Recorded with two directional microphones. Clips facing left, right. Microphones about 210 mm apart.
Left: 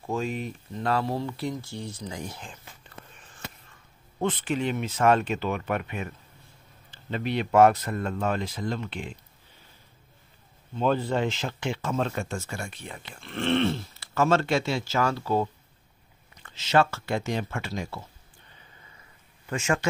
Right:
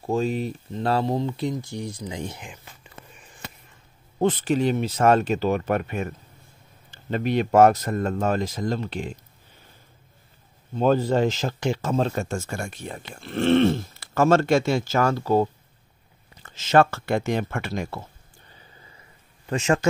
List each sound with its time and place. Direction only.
0.0 s speech: 35° right (ahead or behind); by 3.4 s 10° right (ahead or behind)
4.2 s speech: 40° right (ahead or behind)
10.7 s speech: 40° right (ahead or behind); by 18.0 s 55° right (ahead or behind)
19.4 s speech: 35° right (ahead or behind)